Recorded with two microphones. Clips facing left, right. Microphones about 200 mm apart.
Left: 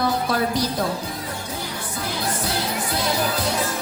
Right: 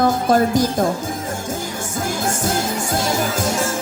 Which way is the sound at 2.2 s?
45° right (ahead or behind).